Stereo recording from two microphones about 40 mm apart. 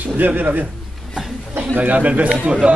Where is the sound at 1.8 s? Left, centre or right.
Right.